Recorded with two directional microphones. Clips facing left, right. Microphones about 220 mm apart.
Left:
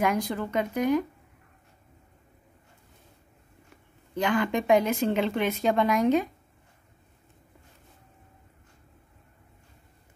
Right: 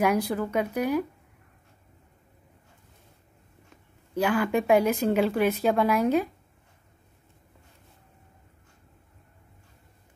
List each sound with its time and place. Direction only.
0.0 s speech: 10° right (ahead or behind)
4.1 s speech: 5° right (ahead or behind)